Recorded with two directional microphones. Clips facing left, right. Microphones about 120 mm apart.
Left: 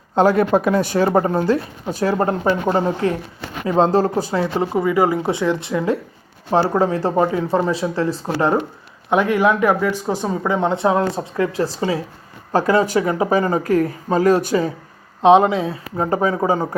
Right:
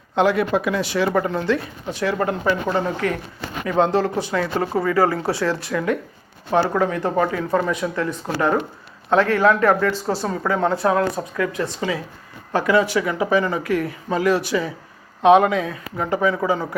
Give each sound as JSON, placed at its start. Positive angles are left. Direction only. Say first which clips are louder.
{"t": 0.2, "sound": "speech", "louder": "left 4 dB", "side_deg": 40}
{"t": 4.4, "sound": "speech", "louder": "left 1 dB", "side_deg": 20}
{"t": 9.0, "sound": "speech", "louder": "even", "side_deg": 15}
{"t": 15.2, "sound": "speech", "louder": "left 2 dB", "side_deg": 25}